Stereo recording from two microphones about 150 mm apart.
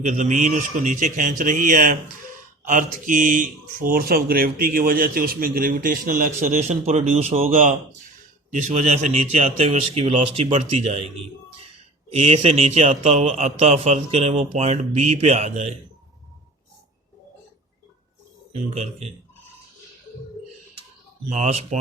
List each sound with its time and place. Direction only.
0.0 s a man's voice: 55° right (ahead or behind)
7.4 s a man's voice: 60° right (ahead or behind)
12.1 s a man's voice: 45° right (ahead or behind)
18.5 s a man's voice: 45° right (ahead or behind)
21.2 s a man's voice: 50° right (ahead or behind)